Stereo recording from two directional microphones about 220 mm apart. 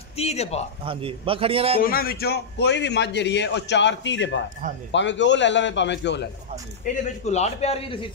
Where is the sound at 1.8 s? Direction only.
40° left (ahead or behind).